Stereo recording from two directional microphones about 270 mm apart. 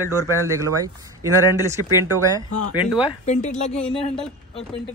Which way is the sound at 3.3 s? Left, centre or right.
Left.